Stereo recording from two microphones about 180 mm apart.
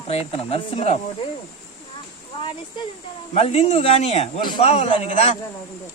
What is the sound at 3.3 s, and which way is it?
Speech, 35° left (ahead or behind).